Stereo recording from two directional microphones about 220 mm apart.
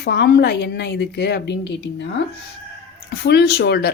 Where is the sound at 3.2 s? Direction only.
50° left (ahead or behind).